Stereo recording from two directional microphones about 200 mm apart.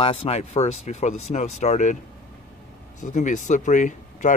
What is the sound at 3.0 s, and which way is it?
Speech, 40° left (ahead or behind).